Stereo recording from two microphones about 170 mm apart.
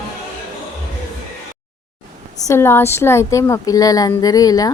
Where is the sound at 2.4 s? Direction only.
15° left (ahead or behind).